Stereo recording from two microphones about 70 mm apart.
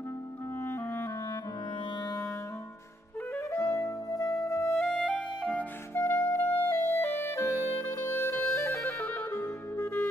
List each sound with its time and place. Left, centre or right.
0.6 s clarinet: left
2.0 s music: left
3.3 s clarinet: left
4.7 s music: left
5.9 s music: left
6.5 s clarinet: left
7.9 s music: left
9.0 s music: left
9.8 s music: left